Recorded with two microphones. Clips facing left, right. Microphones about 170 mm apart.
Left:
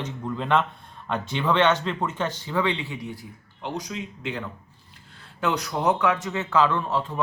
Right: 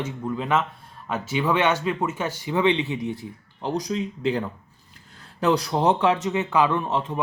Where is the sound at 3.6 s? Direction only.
35° right (ahead or behind).